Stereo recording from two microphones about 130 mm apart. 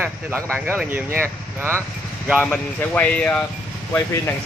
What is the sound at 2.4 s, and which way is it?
Speech, 10° left (ahead or behind).